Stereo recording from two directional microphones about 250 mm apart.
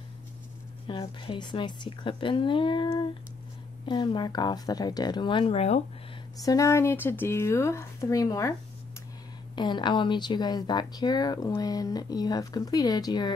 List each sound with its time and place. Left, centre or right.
0.8 s a woman's voice: centre
6.4 s speech: centre
9.6 s speech: centre